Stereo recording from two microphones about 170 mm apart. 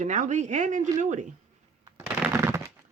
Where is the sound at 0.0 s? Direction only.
45° right (ahead or behind).